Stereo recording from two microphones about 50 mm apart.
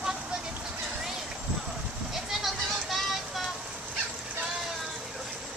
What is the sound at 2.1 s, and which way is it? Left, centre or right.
Music, centre.